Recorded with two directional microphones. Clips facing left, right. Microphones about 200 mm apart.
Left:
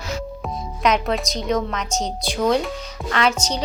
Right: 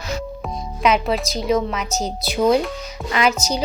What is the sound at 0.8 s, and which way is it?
A woman's voice, 5° right (ahead or behind).